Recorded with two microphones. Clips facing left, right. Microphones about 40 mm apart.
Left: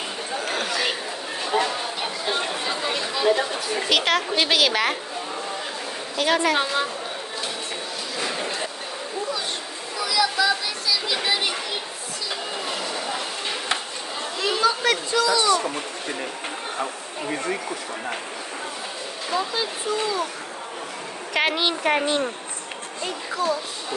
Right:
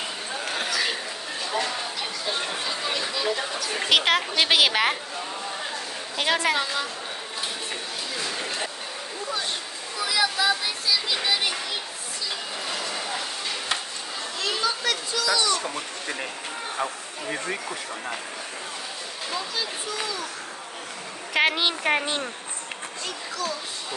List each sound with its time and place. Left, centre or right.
0.7 s chatter: centre
1.4 s a sound: left
2.6 s chatter: centre
3.9 s a woman's voice: centre
6.2 s a woman's voice: centre
6.5 s speech: left
8.2 s a sound: left
10.0 s a sound: right
11.1 s children playing: centre
12.6 s a sound: centre
14.4 s children playing: centre
19.3 s speech: centre
21.3 s a woman's voice: centre
23.0 s speech: left